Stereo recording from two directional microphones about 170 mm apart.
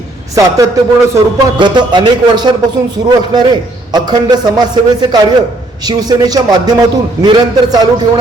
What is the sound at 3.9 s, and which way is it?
A man's voice, 25° right (ahead or behind).